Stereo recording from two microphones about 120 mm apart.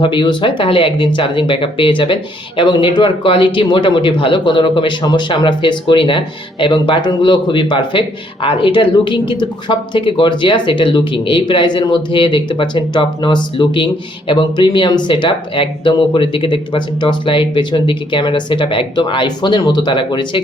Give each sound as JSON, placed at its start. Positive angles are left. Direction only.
{"t": 0.0, "sound": "speech", "side_deg": 40}